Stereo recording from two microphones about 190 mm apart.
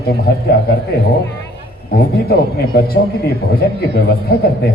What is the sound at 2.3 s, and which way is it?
Speech, 55° left (ahead or behind).